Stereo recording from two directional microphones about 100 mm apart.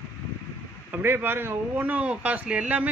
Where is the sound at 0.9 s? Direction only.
20° right (ahead or behind).